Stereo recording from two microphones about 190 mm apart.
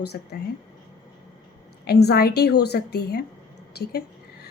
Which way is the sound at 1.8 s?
55° left (ahead or behind).